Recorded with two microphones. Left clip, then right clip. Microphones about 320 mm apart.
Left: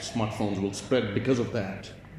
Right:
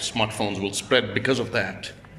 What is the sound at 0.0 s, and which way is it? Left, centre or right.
Speech, right.